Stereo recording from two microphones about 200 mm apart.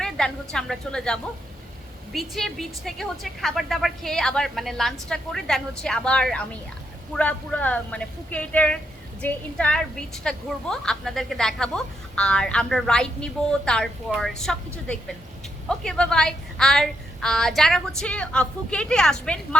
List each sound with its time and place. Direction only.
0.0 s a woman's voice: 5° left (ahead or behind)